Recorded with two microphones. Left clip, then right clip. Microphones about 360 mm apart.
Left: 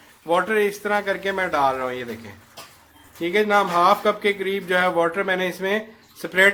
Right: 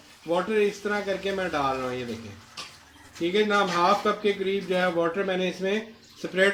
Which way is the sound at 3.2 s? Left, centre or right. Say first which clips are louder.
Left 4 dB; centre.